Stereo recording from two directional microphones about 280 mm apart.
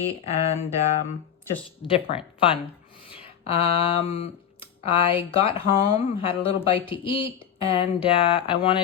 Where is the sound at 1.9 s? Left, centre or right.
Centre.